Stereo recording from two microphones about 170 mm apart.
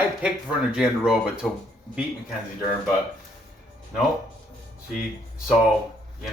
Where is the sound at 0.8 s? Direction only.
5° right (ahead or behind).